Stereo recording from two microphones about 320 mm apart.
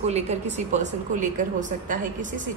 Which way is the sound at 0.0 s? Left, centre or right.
Right.